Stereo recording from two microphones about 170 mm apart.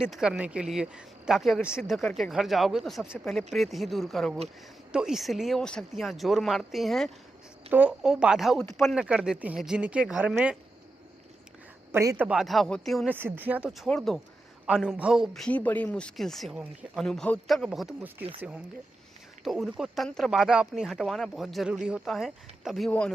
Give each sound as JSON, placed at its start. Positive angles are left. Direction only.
{"t": 0.0, "sound": "speech", "side_deg": -5}
{"t": 11.9, "sound": "a man's voice", "side_deg": -15}
{"t": 12.2, "sound": "speech", "side_deg": -5}
{"t": 13.1, "sound": "speech", "side_deg": -10}